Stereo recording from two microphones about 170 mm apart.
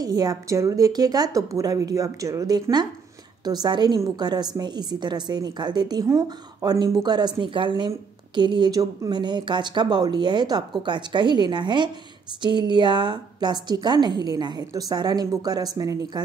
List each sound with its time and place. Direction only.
0.0 s a woman's voice: 20° right (ahead or behind)